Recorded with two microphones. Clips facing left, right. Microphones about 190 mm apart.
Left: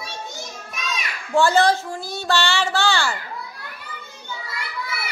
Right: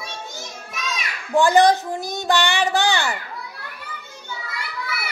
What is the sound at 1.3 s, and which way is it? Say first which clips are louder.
Speech: right 2 dB; 15° right (ahead or behind).